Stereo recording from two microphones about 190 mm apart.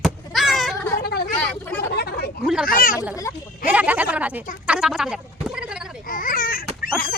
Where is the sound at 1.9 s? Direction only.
55° left (ahead or behind).